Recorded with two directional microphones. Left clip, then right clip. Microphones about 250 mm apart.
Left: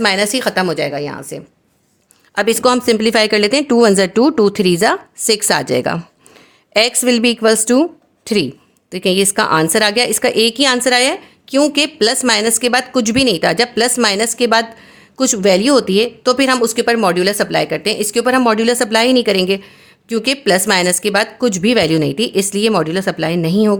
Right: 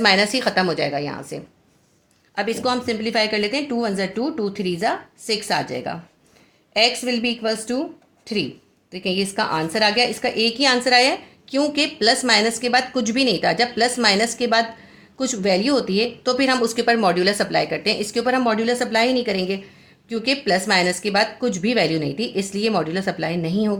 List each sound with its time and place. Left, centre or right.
0.0 s a woman's voice: left
2.3 s a woman's voice: left